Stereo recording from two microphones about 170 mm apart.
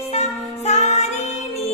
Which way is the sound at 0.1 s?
40° left (ahead or behind).